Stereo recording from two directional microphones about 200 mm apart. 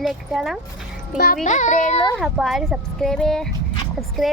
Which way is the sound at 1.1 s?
45° left (ahead or behind).